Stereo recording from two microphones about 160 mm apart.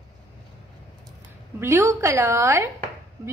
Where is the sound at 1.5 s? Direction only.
15° right (ahead or behind).